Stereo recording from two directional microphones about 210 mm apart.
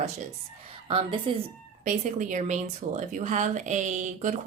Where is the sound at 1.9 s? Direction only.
35° right (ahead or behind).